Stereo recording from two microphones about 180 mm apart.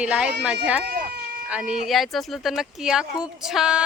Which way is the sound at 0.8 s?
60° right (ahead or behind).